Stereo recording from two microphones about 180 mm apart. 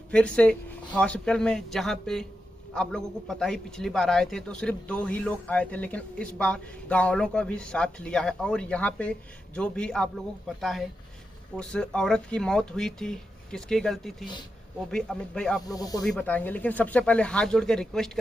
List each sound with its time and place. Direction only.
0.1 s a man's voice: 5° left (ahead or behind)
15.6 s speech: 20° left (ahead or behind)
16.0 s speech: 5° left (ahead or behind)